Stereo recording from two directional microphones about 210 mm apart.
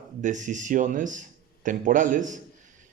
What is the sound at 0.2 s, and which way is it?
A man's voice, 35° right (ahead or behind).